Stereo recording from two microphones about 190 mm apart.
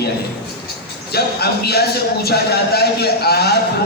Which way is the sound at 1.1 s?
55° left (ahead or behind).